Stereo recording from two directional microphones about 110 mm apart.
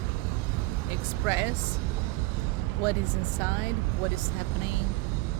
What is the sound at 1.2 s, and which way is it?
Speech, 25° right (ahead or behind).